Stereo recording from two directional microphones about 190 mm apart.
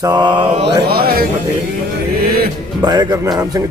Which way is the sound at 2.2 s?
50° right (ahead or behind).